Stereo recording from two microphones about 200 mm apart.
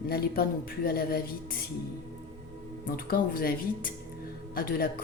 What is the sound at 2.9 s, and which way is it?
A woman's voice, 45° left (ahead or behind).